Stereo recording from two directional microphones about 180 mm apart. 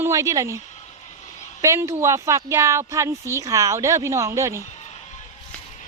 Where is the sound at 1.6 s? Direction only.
15° right (ahead or behind).